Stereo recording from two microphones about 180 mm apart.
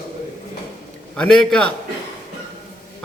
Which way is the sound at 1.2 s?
5° left (ahead or behind).